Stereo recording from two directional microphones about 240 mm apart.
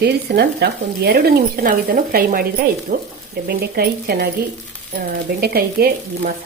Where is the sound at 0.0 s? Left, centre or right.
Right.